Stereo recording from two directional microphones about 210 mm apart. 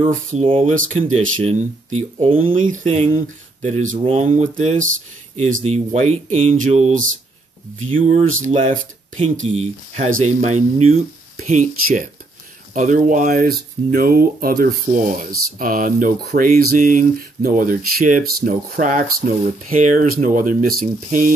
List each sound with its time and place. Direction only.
0.0 s speech: 30° right (ahead or behind)